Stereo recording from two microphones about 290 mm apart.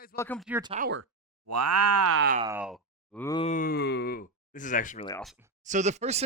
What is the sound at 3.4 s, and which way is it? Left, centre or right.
Speech, left.